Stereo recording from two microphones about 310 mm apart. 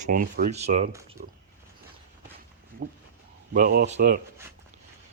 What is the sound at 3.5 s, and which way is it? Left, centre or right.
Speech, right.